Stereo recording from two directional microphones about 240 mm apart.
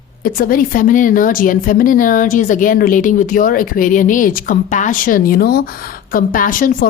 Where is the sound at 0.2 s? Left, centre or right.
Left.